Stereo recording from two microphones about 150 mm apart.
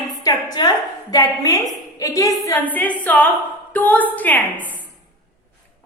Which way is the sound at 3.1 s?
10° left (ahead or behind).